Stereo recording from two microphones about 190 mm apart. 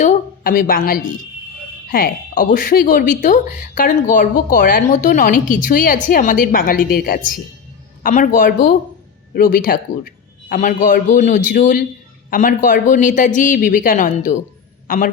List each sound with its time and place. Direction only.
0.0 s a man's voice: 45° left (ahead or behind)